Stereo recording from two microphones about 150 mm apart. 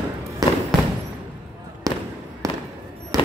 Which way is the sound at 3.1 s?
25° right (ahead or behind).